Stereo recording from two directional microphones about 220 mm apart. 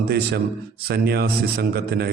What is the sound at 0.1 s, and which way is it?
A man's voice, 45° right (ahead or behind).